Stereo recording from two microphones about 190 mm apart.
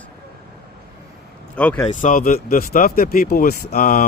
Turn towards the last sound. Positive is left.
turn(degrees=50)  # may be behind; listen again after turning